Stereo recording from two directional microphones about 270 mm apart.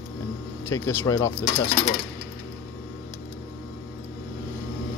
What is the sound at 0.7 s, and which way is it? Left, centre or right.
Speech, centre.